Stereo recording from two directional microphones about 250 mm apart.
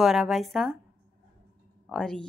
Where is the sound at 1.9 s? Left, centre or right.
Centre.